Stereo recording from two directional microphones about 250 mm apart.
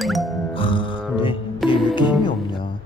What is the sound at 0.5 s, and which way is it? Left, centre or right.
Speech, centre.